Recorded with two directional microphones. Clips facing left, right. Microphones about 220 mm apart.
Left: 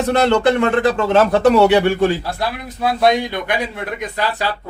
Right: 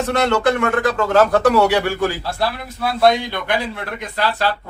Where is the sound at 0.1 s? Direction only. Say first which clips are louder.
Left 3 dB; 30° left (ahead or behind).